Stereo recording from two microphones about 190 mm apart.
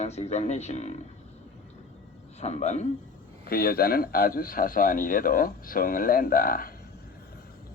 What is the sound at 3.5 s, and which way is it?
A man's voice, 55° left (ahead or behind).